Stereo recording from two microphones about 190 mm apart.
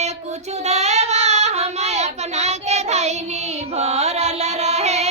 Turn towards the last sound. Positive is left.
turn(degrees=-35)  # may be behind; listen again after turning